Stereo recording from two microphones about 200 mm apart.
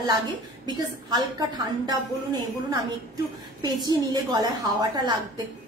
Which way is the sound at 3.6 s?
20° right (ahead or behind).